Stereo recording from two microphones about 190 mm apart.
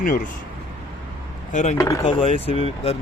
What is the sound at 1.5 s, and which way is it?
Speech, 40° left (ahead or behind).